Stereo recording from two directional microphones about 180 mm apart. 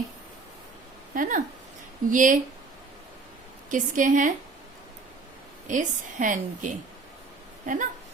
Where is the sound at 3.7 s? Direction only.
45° right (ahead or behind).